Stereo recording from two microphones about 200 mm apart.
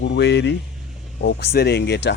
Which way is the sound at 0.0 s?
60° left (ahead or behind).